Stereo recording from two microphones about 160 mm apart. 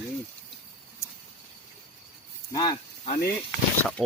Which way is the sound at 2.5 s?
25° left (ahead or behind).